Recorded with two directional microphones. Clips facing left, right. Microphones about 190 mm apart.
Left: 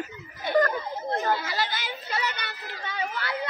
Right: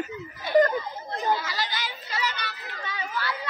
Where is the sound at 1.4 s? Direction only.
55° left (ahead or behind).